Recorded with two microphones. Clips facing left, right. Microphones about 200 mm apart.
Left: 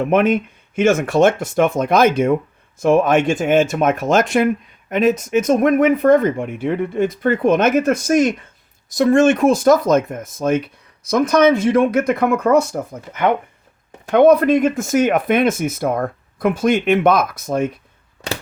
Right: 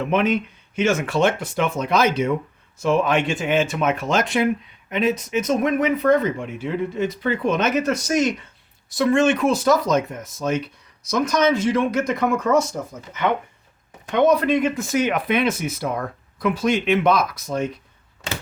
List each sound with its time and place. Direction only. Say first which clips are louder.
0.0 s speech: left 5 dB; 50° left (ahead or behind)